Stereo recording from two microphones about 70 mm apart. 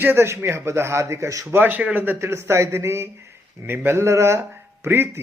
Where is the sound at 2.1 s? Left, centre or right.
Right.